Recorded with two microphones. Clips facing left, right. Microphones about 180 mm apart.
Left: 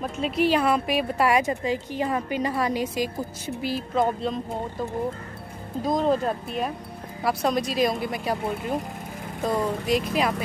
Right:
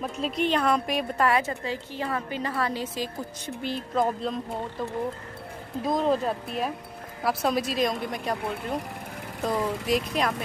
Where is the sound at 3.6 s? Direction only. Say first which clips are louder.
Left 2 dB; centre (ahead or behind).